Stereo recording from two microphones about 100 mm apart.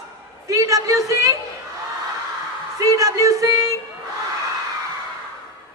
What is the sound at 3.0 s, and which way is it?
Speech, 35° right (ahead or behind).